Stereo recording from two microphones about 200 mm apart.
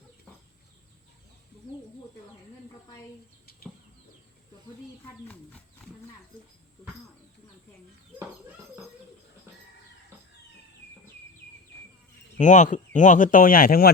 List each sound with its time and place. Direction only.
5.3 s wild animals: 5° left (ahead or behind)
12.4 s speech: 40° left (ahead or behind)